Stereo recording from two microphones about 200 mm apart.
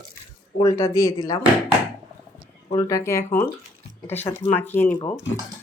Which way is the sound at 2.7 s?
15° left (ahead or behind).